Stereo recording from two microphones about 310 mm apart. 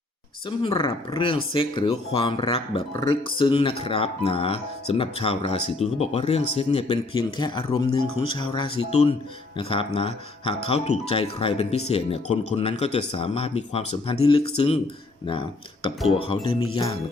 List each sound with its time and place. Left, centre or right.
0.6 s speech: centre